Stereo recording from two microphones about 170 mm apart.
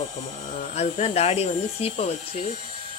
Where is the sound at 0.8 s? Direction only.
40° left (ahead or behind).